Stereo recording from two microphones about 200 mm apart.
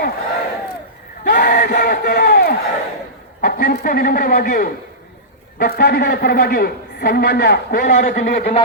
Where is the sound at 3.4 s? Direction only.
50° left (ahead or behind).